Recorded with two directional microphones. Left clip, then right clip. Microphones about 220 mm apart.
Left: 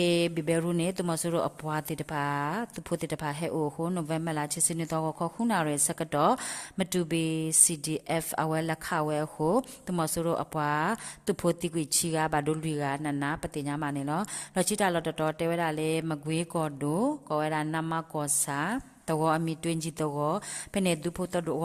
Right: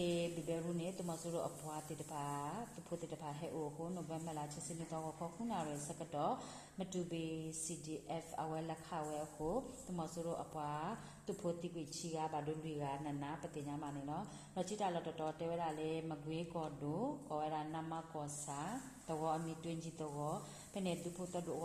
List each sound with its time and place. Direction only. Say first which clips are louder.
0.0 s a woman's voice: left 13 dB; 45° left (ahead or behind)